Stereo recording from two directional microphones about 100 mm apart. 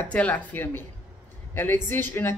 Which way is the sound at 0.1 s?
15° left (ahead or behind).